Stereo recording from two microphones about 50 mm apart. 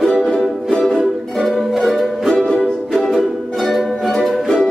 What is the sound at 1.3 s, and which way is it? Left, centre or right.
Music, centre.